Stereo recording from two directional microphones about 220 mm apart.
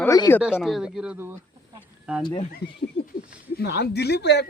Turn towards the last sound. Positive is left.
turn(degrees=50)  # may be behind; listen again after turning